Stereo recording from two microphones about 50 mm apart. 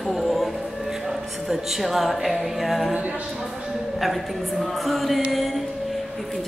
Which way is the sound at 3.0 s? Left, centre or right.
Right.